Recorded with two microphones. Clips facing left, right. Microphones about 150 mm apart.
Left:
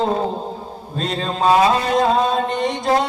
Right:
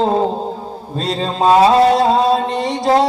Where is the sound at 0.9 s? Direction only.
35° right (ahead or behind).